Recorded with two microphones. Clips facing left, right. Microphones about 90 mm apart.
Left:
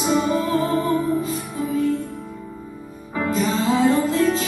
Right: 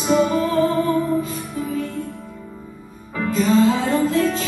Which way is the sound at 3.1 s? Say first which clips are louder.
Right 4 dB; 30° left (ahead or behind).